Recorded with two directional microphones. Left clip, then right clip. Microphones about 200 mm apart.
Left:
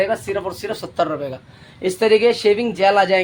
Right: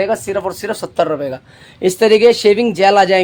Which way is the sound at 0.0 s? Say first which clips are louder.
Right 3 dB; 60° right (ahead or behind).